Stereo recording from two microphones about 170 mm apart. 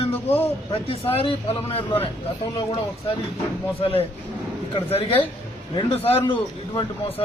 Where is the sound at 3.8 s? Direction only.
35° left (ahead or behind).